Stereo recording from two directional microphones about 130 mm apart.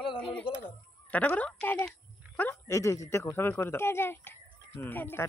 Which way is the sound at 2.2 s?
10° right (ahead or behind).